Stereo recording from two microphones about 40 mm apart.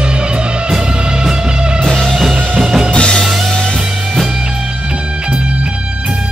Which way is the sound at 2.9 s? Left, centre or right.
Left.